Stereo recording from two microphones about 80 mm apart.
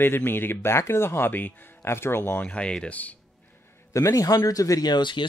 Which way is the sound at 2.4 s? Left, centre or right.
Centre.